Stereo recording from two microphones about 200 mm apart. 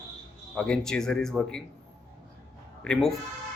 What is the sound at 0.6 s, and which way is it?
Speech, 5° left (ahead or behind).